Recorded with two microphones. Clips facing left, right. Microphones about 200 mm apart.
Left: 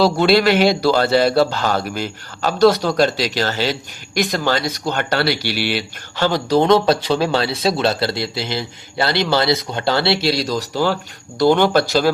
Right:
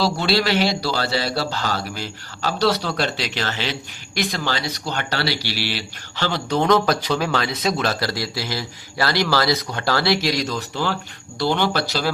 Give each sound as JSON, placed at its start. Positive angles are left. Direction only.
{"t": 0.0, "sound": "a man's voice", "side_deg": 55}
{"t": 6.6, "sound": "speech", "side_deg": 30}
{"t": 11.3, "sound": "a man's voice", "side_deg": 50}